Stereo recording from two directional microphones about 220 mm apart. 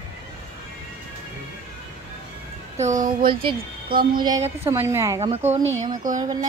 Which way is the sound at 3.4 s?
25° right (ahead or behind).